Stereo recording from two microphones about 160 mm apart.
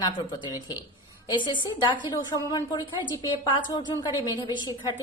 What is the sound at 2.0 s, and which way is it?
A woman's voice, 20° left (ahead or behind).